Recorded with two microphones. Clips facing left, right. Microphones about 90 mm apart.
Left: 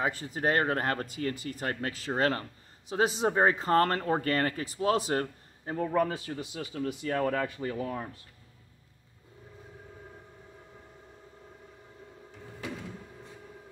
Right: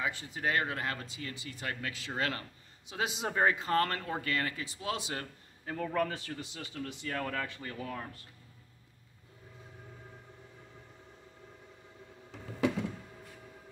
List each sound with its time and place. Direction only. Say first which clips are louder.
0.0 s speech: left 5 dB; 40° left (ahead or behind)
5.7 s a man's voice: left 5 dB; 25° left (ahead or behind)
7.1 s speech: left 7 dB; 25° left (ahead or behind)